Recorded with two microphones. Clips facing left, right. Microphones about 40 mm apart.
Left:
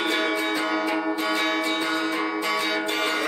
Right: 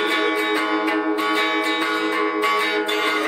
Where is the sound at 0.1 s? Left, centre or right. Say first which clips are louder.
Right 4 dB; right.